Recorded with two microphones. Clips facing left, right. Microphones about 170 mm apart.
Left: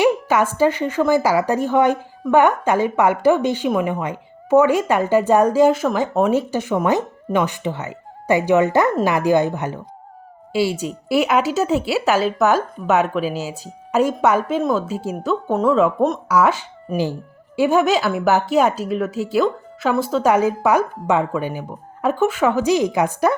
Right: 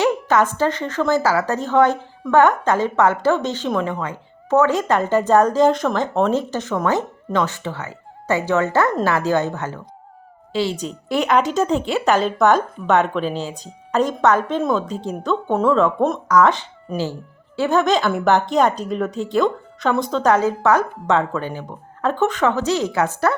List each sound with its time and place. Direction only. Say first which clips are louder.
0.0 s a woman's voice: left 1 dB; 10° left (ahead or behind)